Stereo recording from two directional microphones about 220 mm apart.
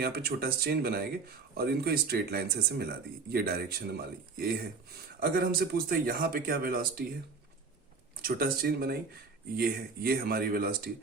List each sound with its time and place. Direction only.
0.0 s speech: 45° right (ahead or behind)
8.2 s speech: 45° right (ahead or behind)